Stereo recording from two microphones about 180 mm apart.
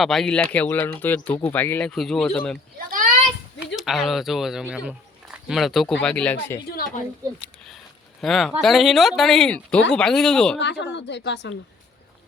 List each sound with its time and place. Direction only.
0.0 s speech: centre (ahead or behind)
2.7 s a sound: 50° right (ahead or behind)
3.8 s speech: centre (ahead or behind)
6.7 s a woman's voice: 50° left (ahead or behind)
8.2 s speech: centre (ahead or behind)
10.6 s a woman's voice: 75° left (ahead or behind)